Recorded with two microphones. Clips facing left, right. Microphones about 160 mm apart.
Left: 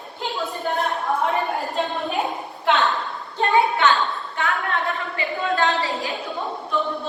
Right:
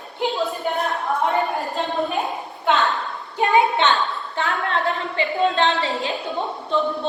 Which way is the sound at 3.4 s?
20° right (ahead or behind).